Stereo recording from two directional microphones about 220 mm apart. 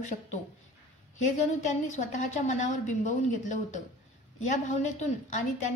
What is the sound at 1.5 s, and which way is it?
A woman's voice, 35° left (ahead or behind).